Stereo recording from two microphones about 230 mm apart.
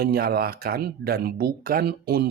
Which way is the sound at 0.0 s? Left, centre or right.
Right.